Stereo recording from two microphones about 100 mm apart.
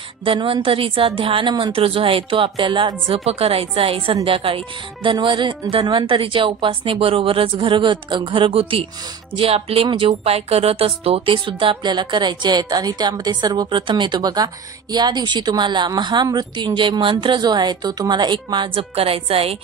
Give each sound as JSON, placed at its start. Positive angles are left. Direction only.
{"t": 0.2, "sound": "a woman's voice", "side_deg": -65}
{"t": 3.1, "sound": "a woman's voice", "side_deg": -80}
{"t": 5.1, "sound": "a woman's voice", "side_deg": -50}
{"t": 11.3, "sound": "a woman's voice", "side_deg": -55}